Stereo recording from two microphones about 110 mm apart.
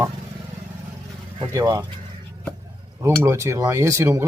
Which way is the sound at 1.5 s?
30° right (ahead or behind).